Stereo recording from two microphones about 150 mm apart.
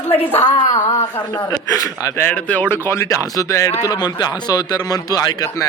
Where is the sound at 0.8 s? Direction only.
25° left (ahead or behind).